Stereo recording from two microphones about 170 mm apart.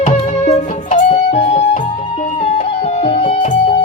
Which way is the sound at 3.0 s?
40° left (ahead or behind).